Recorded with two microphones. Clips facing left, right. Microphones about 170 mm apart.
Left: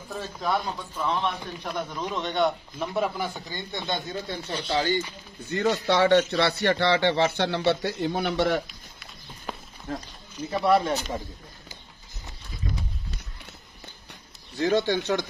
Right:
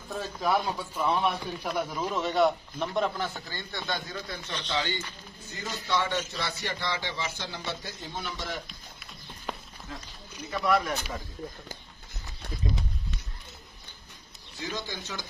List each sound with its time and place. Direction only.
0.1 s a man's voice: 5° right (ahead or behind); by 4.6 s 25° left (ahead or behind)
4.6 s speech: 40° left (ahead or behind)
5.5 s a man's voice: 70° left (ahead or behind)
8.6 s a sound: centre (ahead or behind)
9.9 s speech: 50° left (ahead or behind)
10.5 s speech: 30° left (ahead or behind)
14.6 s speech: 65° left (ahead or behind)